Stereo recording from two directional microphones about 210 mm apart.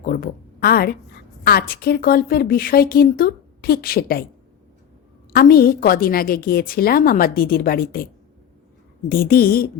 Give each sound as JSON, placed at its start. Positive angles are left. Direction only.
{"t": 0.0, "sound": "a woman's voice", "side_deg": 40}
{"t": 5.3, "sound": "a woman's voice", "side_deg": 45}
{"t": 9.0, "sound": "a woman's voice", "side_deg": 45}